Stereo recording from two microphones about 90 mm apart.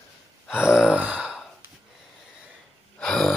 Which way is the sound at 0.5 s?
10° right (ahead or behind).